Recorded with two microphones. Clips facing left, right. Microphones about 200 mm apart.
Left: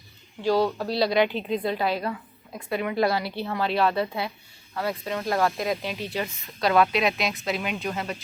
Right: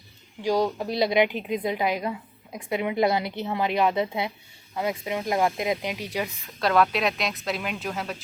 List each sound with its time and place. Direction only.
0.4 s a woman's voice: 15° right (ahead or behind)
6.1 s speech: centre (ahead or behind)